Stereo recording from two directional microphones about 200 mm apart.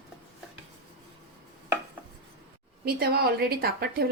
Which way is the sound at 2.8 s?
50° right (ahead or behind).